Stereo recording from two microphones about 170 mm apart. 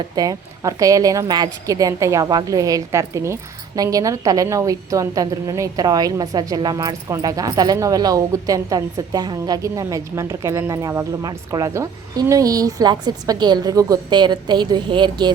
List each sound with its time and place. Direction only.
0.2 s a woman's voice: 20° right (ahead or behind)